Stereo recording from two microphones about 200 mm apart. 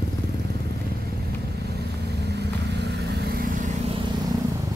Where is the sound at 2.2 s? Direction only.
55° right (ahead or behind).